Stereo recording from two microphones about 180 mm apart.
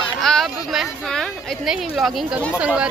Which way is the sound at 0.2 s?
Centre (ahead or behind).